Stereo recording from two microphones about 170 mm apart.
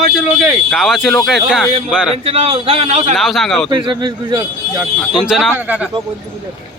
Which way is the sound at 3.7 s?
25° right (ahead or behind).